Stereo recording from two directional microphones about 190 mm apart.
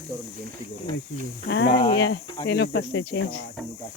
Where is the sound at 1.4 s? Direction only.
65° left (ahead or behind).